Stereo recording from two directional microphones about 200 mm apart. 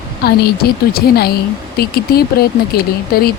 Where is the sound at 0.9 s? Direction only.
50° left (ahead or behind).